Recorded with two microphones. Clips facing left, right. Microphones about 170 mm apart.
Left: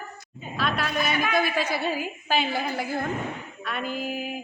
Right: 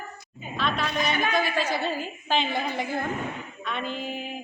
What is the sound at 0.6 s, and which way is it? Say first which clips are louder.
A woman's voice: even; 5° left (ahead or behind).